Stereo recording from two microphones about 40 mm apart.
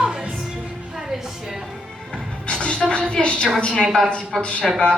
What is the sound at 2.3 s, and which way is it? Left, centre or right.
Music, left.